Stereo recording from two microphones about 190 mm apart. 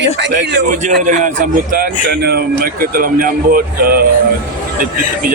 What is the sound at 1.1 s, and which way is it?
A man's voice, 40° right (ahead or behind).